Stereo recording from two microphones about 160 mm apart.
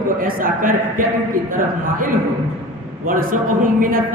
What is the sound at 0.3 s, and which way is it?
Speech, 60° right (ahead or behind).